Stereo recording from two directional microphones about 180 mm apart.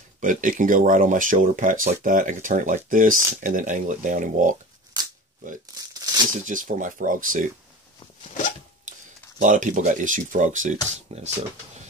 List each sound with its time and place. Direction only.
0.2 s speech: 45° right (ahead or behind)
5.9 s crumpling: 20° right (ahead or behind)
6.4 s speech: 45° right (ahead or behind)
9.4 s speech: 45° right (ahead or behind)